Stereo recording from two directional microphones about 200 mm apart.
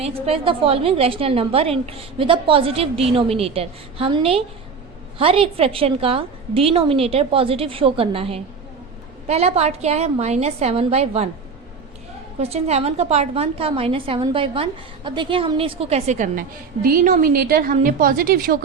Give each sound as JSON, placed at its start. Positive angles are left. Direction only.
{"t": 0.0, "sound": "a woman's voice", "side_deg": -30}
{"t": 12.4, "sound": "a woman's voice", "side_deg": -30}